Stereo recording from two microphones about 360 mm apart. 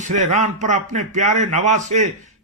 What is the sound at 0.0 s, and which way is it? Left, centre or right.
Speech, centre.